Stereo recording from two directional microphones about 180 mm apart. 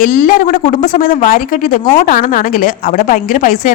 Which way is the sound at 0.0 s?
50° left (ahead or behind).